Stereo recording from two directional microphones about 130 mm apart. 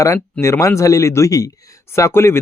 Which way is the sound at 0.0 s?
20° left (ahead or behind).